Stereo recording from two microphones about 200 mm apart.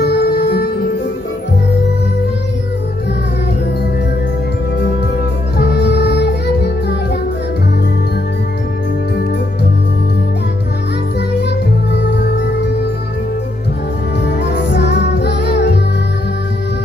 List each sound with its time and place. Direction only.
0.0 s music: 55° left (ahead or behind)
5.6 s music: 55° left (ahead or behind)
11.9 s music: 55° left (ahead or behind)
14.2 s music: 60° left (ahead or behind)